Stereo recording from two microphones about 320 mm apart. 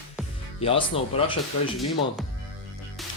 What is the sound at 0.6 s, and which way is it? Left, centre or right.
Speech, centre.